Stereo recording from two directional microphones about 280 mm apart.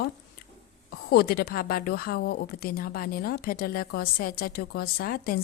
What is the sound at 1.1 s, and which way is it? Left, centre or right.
A woman's voice, left.